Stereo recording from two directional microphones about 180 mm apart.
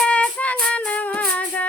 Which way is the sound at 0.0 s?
5° left (ahead or behind).